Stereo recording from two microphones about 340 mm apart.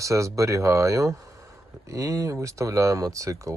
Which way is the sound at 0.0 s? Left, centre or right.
Centre.